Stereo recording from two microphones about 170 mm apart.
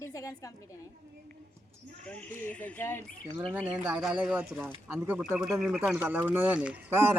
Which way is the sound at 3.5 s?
10° right (ahead or behind).